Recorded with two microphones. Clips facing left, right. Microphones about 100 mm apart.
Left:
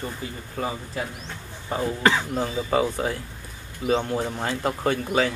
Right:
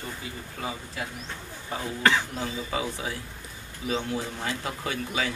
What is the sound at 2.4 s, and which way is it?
Speech, 45° left (ahead or behind).